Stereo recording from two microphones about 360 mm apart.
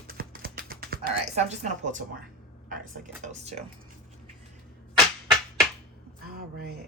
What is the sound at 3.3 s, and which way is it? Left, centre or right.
Speech, centre.